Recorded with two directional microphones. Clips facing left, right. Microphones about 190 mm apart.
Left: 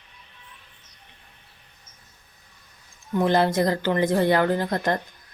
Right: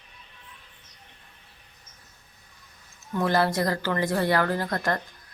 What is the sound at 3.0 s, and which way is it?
Speech, 20° left (ahead or behind).